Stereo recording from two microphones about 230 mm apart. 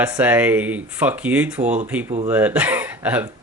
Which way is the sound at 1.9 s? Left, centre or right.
Centre.